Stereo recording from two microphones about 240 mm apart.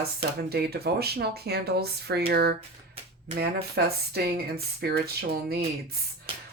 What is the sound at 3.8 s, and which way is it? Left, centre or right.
Speech, right.